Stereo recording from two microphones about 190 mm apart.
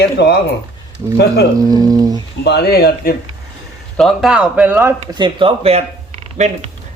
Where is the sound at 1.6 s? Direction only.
20° right (ahead or behind).